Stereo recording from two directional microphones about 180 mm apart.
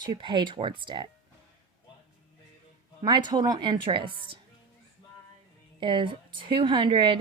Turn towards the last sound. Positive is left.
turn(degrees=-25)  # may be behind; listen again after turning